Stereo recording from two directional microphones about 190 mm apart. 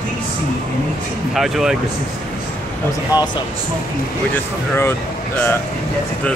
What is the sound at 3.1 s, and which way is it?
Speech, 20° left (ahead or behind).